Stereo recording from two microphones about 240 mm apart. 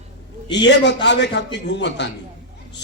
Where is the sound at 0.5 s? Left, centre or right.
Left.